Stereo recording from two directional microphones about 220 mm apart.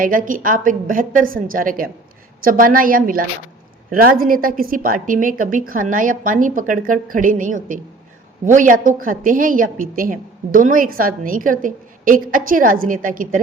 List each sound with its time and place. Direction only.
0.0 s a woman's voice: 40° right (ahead or behind)